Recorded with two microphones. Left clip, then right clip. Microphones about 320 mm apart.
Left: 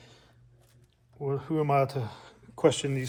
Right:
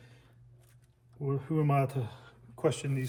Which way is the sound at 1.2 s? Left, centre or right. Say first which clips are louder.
Left 4 dB; centre.